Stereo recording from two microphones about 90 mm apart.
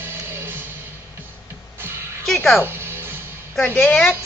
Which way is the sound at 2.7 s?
25° right (ahead or behind).